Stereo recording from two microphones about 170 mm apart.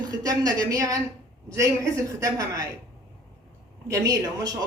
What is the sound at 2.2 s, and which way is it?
Speech, 20° right (ahead or behind).